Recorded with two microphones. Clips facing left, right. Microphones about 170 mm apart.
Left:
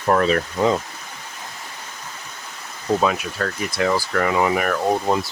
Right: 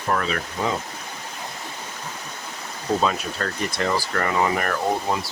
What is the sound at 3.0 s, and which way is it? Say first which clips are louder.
Speech: left 2 dB; 5° left (ahead or behind).